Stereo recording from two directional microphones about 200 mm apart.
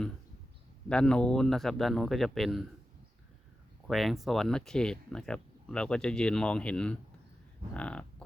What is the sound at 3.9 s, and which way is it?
Speech, centre (ahead or behind).